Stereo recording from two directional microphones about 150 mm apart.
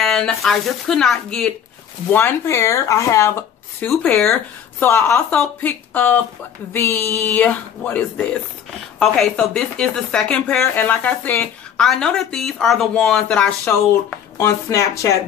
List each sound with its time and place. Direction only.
0.0 s a woman's voice: 5° left (ahead or behind)
2.1 s a woman's voice: 15° left (ahead or behind)
14.4 s speech: 20° left (ahead or behind)